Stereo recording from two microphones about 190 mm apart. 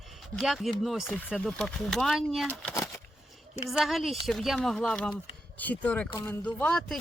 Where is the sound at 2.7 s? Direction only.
15° left (ahead or behind).